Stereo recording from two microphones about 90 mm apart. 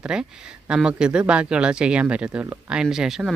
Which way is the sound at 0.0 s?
10° right (ahead or behind).